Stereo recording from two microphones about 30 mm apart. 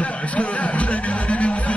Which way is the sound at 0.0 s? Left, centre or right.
Left.